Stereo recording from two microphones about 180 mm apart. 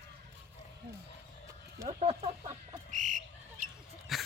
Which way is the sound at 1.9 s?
35° right (ahead or behind).